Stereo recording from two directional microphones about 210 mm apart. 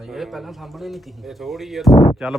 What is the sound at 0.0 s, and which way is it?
Speech, centre (ahead or behind).